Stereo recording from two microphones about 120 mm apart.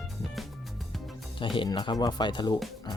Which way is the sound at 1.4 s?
45° left (ahead or behind).